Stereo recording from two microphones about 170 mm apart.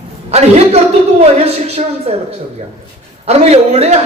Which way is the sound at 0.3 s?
40° right (ahead or behind).